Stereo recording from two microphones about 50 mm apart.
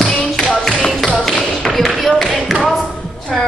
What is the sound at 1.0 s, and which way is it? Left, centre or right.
Tap, centre.